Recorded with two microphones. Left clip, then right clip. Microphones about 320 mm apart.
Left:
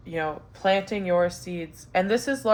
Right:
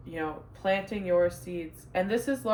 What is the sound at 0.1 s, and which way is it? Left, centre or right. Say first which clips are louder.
Speech: left 6 dB; left.